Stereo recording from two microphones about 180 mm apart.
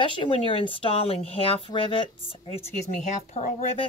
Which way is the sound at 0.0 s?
30° left (ahead or behind).